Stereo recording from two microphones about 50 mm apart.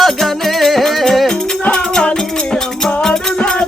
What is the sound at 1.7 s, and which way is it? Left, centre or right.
Music, centre.